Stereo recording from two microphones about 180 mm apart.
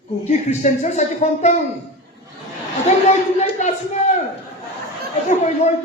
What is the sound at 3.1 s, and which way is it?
Speech, 40° left (ahead or behind).